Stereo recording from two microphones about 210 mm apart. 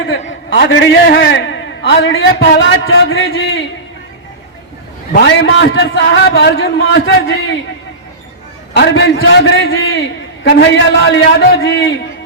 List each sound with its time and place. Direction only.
0.5 s a man's voice: 50° left (ahead or behind)
5.2 s a man's voice: 60° left (ahead or behind)
8.7 s a man's voice: 55° left (ahead or behind)
10.5 s a man's voice: 50° left (ahead or behind)